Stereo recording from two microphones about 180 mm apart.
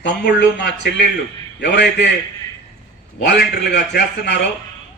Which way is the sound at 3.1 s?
70° left (ahead or behind).